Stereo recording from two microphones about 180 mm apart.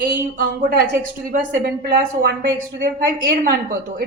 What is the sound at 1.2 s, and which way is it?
A woman's voice, 55° right (ahead or behind).